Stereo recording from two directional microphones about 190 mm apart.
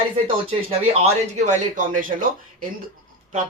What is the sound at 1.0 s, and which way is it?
A man's voice, 40° right (ahead or behind).